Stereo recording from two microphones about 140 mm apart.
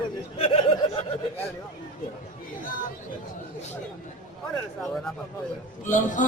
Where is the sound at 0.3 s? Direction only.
45° left (ahead or behind).